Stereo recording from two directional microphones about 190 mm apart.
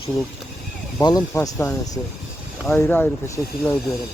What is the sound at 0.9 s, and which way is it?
Speech, 20° left (ahead or behind).